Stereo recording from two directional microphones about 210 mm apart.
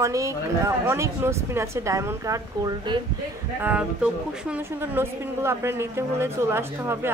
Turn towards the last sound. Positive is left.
turn(degrees=-10)  # may be behind; listen again after turning